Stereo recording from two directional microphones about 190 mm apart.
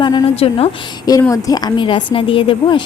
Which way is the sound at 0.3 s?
30° left (ahead or behind).